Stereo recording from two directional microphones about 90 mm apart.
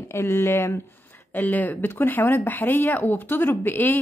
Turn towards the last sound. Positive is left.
turn(degrees=20)  # may be behind; listen again after turning